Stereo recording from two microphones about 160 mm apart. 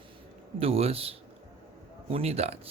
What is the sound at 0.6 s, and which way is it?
Speech, 35° right (ahead or behind).